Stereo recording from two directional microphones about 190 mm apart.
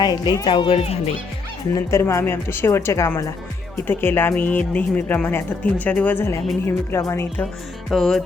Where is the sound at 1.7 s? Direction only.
15° left (ahead or behind).